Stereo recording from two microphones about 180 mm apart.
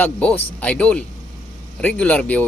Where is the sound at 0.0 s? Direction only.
10° left (ahead or behind).